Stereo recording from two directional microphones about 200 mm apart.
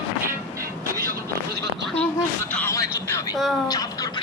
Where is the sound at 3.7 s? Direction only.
20° left (ahead or behind).